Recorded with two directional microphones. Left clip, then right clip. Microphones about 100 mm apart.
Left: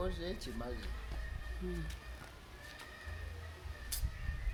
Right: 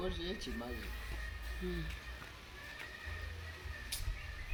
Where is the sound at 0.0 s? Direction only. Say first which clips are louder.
Even; 55° left (ahead or behind).